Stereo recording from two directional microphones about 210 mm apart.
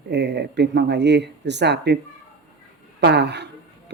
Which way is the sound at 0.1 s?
55° right (ahead or behind).